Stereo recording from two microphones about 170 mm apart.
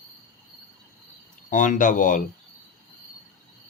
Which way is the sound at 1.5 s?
50° left (ahead or behind).